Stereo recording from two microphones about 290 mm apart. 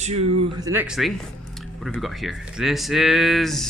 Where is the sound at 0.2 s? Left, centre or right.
Right.